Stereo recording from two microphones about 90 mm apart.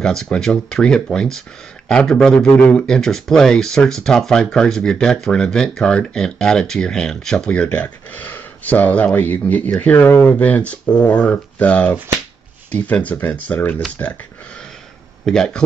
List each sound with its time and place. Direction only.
0.0 s speech: 10° left (ahead or behind)
15.2 s speech: 5° left (ahead or behind)